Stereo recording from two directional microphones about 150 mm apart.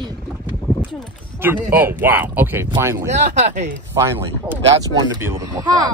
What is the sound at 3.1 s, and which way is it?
Speech, 55° right (ahead or behind).